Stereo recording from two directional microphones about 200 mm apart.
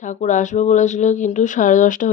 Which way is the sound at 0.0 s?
40° left (ahead or behind).